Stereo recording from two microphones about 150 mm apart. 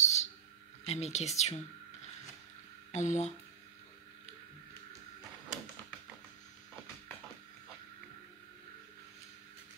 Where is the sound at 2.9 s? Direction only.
50° left (ahead or behind).